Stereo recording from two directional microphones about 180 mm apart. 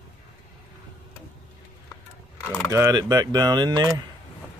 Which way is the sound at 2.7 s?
20° right (ahead or behind).